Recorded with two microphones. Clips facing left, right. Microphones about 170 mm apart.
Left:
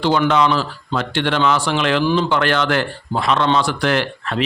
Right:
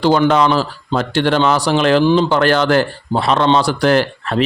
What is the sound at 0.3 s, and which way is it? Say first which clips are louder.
Speech: right 3 dB; 40° right (ahead or behind).